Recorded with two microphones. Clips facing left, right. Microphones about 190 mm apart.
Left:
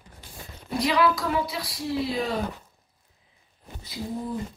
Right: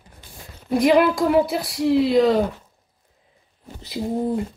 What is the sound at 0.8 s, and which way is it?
A woman's voice, 50° right (ahead or behind).